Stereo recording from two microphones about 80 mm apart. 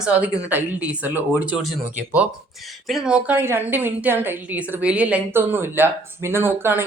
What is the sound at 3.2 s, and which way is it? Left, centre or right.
Speech, right.